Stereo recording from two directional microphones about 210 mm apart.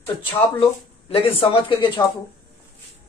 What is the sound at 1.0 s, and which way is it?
Speech, 25° left (ahead or behind).